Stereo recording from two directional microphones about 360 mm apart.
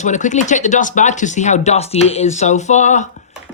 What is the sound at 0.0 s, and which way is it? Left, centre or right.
Speech, centre.